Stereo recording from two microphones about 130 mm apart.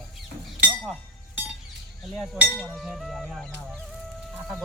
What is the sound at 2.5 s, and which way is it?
Speech, centre (ahead or behind).